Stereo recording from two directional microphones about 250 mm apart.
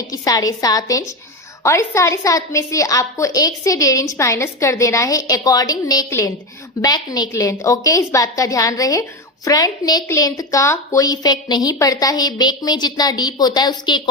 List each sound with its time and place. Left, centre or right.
0.1 s a woman's voice: centre